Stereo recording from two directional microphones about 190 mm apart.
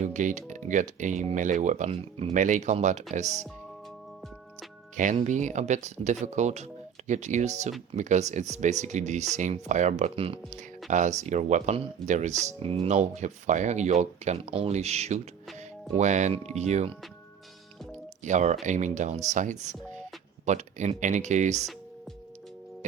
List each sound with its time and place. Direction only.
0.0 s speech: 40° right (ahead or behind)
4.9 s speech: 40° right (ahead or behind)
18.2 s speech: 40° right (ahead or behind)